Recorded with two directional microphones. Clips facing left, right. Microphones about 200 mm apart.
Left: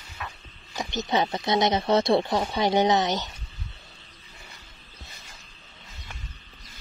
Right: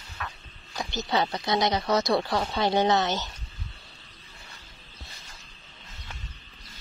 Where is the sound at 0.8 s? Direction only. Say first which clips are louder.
Left 2 dB; 20° left (ahead or behind).